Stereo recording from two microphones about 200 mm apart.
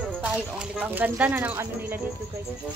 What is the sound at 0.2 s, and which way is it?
Speech, 5° right (ahead or behind).